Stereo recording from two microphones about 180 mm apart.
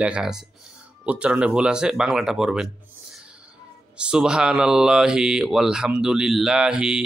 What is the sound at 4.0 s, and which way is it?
Speech, 5° right (ahead or behind).